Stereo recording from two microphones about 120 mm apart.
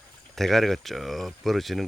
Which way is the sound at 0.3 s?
Centre (ahead or behind).